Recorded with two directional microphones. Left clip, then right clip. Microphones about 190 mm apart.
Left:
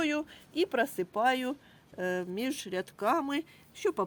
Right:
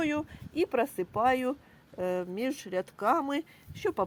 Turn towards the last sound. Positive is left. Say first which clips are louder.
# right 1 dB
turn(degrees=-5)  # may be behind; listen again after turning